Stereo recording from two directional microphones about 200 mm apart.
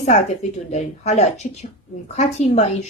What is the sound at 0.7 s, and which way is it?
A woman's voice, 35° left (ahead or behind).